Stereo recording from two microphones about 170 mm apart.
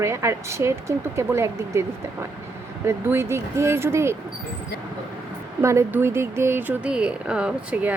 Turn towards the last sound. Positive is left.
turn(degrees=-10)  # may be behind; listen again after turning